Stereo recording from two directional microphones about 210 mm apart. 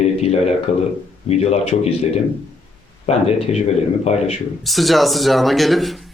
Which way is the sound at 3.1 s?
30° left (ahead or behind).